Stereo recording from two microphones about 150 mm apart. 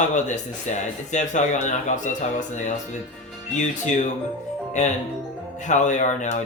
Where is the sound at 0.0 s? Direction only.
55° left (ahead or behind).